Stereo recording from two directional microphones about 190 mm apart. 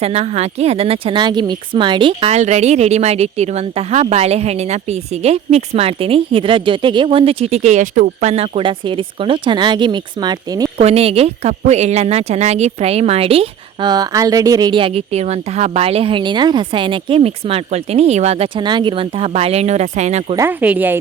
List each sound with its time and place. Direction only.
0.0 s speech: 35° right (ahead or behind)
10.8 s speech: 30° right (ahead or behind)
20.3 s speech: 10° right (ahead or behind)